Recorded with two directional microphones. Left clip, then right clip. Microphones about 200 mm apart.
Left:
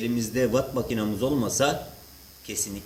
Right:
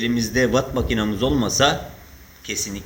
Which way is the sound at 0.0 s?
5° left (ahead or behind).